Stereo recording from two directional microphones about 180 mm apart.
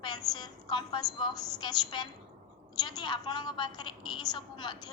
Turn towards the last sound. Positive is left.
turn(degrees=25)  # may be behind; listen again after turning